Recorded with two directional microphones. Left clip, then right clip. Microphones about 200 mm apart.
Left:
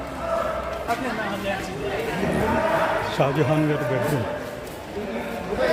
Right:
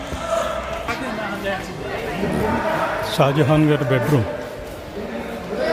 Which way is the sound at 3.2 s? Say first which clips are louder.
Right 7 dB; 25° right (ahead or behind).